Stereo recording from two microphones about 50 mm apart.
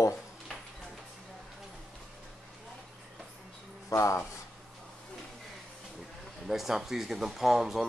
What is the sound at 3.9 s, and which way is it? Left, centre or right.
Speech, left.